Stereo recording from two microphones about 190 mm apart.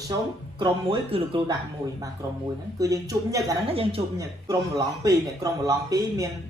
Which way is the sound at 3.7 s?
30° right (ahead or behind).